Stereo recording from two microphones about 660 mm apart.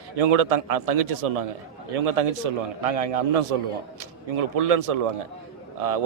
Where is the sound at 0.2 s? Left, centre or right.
Right.